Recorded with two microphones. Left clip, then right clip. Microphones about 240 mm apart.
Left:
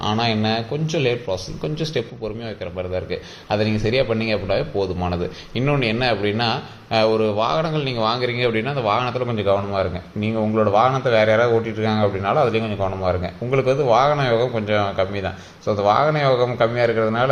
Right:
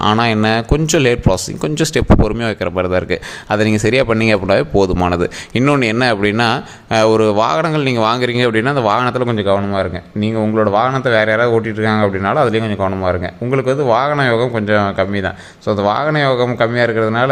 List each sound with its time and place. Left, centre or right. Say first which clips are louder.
0.0 s speech: right 7 dB; right